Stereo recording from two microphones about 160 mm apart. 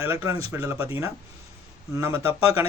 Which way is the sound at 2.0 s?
15° right (ahead or behind).